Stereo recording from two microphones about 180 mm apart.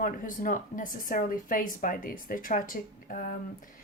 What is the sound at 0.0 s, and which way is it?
Speech, 50° left (ahead or behind).